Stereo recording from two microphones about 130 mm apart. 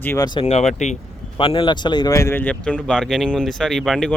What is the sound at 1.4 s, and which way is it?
Speech, 40° left (ahead or behind).